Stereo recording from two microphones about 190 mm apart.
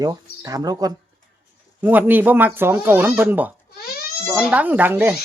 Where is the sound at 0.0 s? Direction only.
20° right (ahead or behind).